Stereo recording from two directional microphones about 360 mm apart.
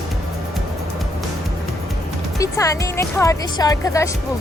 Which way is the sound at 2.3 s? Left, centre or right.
Centre.